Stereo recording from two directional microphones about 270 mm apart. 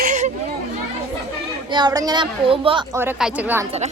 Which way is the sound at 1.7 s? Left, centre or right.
Centre.